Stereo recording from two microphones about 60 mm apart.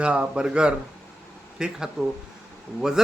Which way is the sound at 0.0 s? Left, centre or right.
Centre.